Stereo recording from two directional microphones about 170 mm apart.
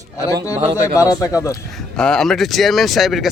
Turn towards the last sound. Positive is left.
turn(degrees=0)  # may be behind; listen again after turning